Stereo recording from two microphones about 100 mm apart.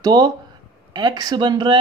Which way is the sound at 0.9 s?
45° right (ahead or behind).